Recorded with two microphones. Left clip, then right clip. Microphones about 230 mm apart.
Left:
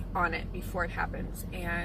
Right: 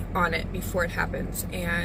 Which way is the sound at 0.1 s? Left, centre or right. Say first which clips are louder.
Right 5 dB; centre.